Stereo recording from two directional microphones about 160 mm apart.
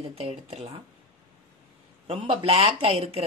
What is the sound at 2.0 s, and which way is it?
A man's voice, 35° right (ahead or behind).